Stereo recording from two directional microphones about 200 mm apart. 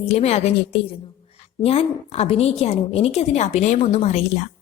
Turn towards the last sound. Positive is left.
turn(degrees=35)  # may be behind; listen again after turning